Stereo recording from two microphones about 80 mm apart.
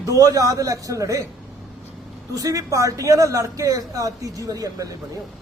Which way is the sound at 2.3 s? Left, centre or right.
Right.